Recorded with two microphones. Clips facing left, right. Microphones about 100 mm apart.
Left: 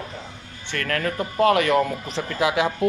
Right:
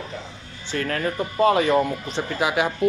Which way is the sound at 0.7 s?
75° left (ahead or behind).